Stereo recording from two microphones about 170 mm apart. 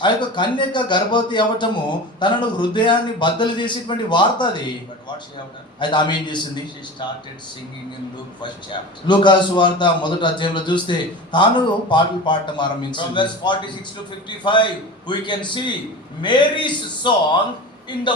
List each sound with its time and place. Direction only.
0.0 s a man's voice: 25° left (ahead or behind)
5.8 s a man's voice: 25° left (ahead or behind)
8.4 s a man's voice: 25° left (ahead or behind)